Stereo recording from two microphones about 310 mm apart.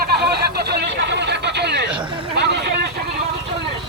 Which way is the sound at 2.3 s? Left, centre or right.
Right.